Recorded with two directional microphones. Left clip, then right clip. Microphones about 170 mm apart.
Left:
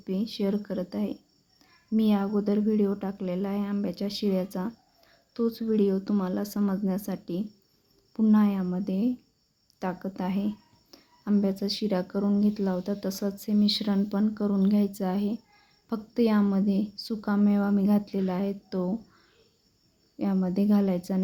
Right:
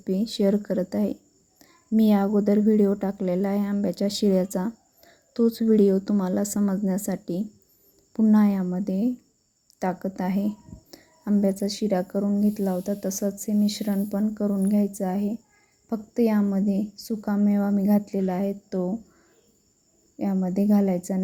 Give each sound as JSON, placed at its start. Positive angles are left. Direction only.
{"t": 0.0, "sound": "a child's voice", "side_deg": -35}
{"t": 20.1, "sound": "speech", "side_deg": -20}